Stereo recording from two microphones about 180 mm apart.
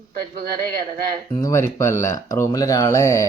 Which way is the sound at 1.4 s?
15° left (ahead or behind).